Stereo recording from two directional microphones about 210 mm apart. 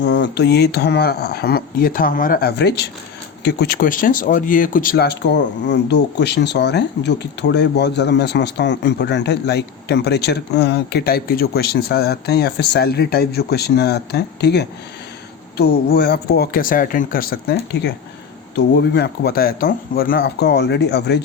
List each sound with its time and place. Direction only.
0.0 s speech: 55° left (ahead or behind)